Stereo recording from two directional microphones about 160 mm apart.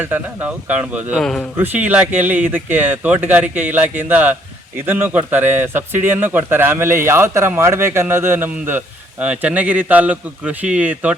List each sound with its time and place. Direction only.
0.0 s a man's voice: 10° right (ahead or behind)
1.2 s speech: 5° left (ahead or behind)
1.5 s a man's voice: 10° right (ahead or behind)